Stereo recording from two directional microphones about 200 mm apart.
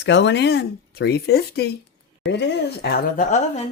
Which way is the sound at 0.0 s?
60° left (ahead or behind).